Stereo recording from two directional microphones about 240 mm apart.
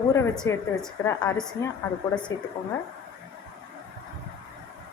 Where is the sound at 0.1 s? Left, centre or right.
Centre.